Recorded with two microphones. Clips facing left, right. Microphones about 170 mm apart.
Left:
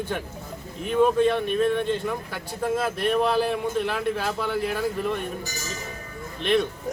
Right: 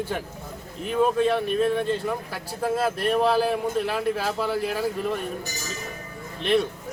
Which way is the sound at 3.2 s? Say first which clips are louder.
Right 2 dB; 35° right (ahead or behind).